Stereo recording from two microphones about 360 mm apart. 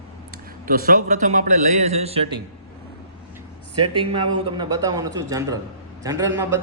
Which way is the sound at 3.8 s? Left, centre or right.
Centre.